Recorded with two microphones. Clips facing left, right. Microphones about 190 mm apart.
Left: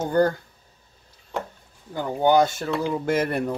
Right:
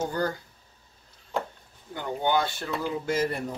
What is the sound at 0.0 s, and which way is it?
Speech, 55° left (ahead or behind).